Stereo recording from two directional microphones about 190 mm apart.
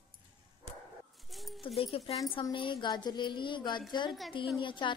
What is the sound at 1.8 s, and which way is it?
A woman's voice, 30° left (ahead or behind).